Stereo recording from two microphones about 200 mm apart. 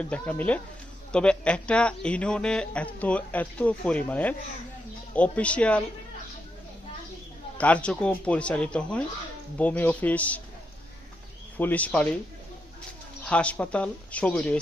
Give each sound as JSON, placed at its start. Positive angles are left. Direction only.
{"t": 0.0, "sound": "speech", "side_deg": 5}
{"t": 7.6, "sound": "speech", "side_deg": 5}
{"t": 11.5, "sound": "speech", "side_deg": 10}
{"t": 13.2, "sound": "speech", "side_deg": 5}